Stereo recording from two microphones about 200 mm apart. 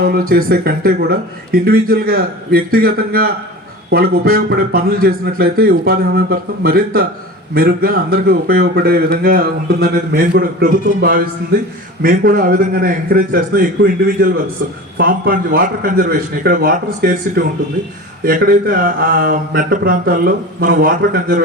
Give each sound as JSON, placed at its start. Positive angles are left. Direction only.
{"t": 0.0, "sound": "speech", "side_deg": -50}